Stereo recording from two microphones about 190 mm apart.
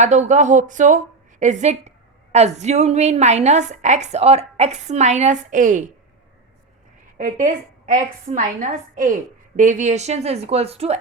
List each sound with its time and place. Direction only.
0.0 s a woman's voice: 40° right (ahead or behind)
7.2 s a woman's voice: 45° right (ahead or behind)